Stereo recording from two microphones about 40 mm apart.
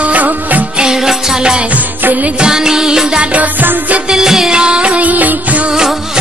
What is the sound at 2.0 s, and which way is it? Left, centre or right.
Music, right.